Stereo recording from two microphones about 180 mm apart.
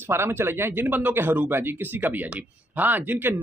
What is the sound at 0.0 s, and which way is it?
Speech, 15° right (ahead or behind).